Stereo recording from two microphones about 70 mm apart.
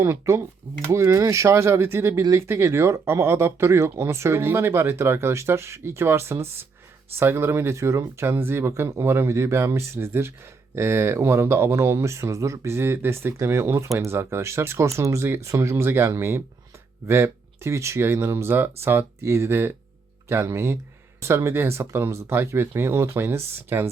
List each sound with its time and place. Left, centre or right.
0.0 s speech: right